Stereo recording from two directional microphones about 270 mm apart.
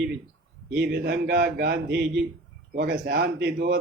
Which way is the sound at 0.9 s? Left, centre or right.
Right.